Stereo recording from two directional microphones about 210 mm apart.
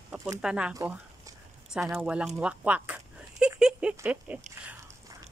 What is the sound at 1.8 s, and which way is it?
Speech, 10° right (ahead or behind).